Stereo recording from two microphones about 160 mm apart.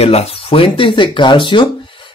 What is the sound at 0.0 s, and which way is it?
Speech, 40° left (ahead or behind).